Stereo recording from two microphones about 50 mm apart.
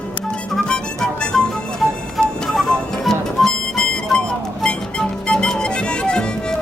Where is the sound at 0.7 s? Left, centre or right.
Centre.